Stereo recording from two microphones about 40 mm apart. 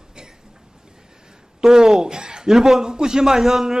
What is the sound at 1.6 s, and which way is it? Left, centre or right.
A man's voice, centre.